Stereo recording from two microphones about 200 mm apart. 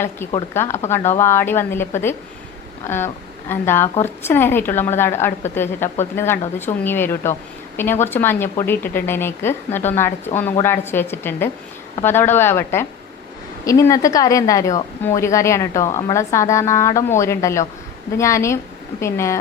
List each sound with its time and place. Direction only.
0.2 s a woman's voice: 10° left (ahead or behind)
3.5 s a woman's voice: 10° left (ahead or behind)